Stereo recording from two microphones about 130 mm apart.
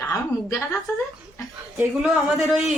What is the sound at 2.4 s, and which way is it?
Speech, centre (ahead or behind).